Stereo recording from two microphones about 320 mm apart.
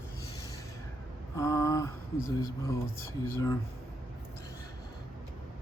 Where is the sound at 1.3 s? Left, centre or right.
Centre.